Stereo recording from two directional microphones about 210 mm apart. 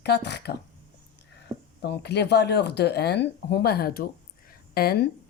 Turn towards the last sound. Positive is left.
turn(degrees=50)  # may be behind; listen again after turning